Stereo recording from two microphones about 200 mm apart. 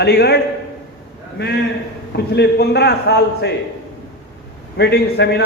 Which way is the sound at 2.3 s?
55° left (ahead or behind).